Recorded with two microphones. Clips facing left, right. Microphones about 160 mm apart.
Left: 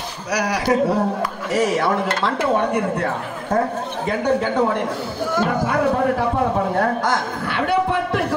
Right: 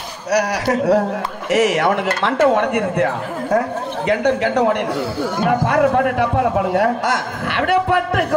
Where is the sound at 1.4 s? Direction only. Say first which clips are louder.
Right 4 dB; 85° right.